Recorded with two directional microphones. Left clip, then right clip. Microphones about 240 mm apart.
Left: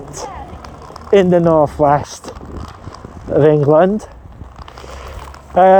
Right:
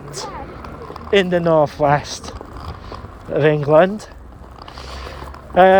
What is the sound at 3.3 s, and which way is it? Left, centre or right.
Speech, left.